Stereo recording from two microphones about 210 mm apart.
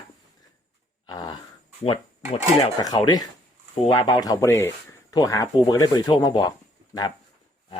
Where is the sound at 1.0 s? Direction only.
20° left (ahead or behind).